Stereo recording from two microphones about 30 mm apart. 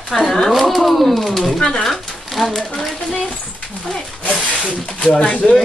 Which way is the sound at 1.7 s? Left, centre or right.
Centre.